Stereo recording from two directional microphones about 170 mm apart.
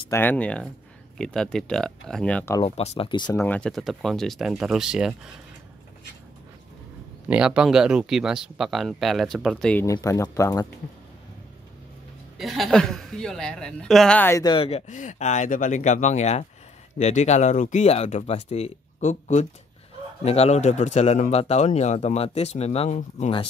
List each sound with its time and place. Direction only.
0.1 s speech: 10° left (ahead or behind)
2.6 s speech: 35° left (ahead or behind)
3.4 s speech: 5° left (ahead or behind)
7.2 s speech: 5° right (ahead or behind)
9.8 s speech: 20° left (ahead or behind)
12.4 s speech: centre (ahead or behind)
14.4 s speech: 30° left (ahead or behind)
14.9 s speech: 45° left (ahead or behind)